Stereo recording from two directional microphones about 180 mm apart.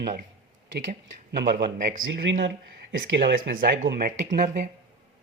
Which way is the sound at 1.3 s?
65° right (ahead or behind).